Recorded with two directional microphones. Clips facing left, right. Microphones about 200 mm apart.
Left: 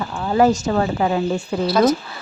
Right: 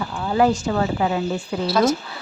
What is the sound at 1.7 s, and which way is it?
Speech, centre (ahead or behind).